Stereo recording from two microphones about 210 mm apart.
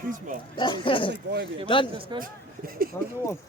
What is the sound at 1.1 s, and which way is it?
Speech, 55° right (ahead or behind).